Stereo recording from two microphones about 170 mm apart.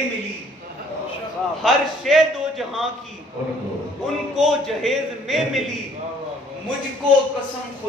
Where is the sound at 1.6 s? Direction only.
Centre (ahead or behind).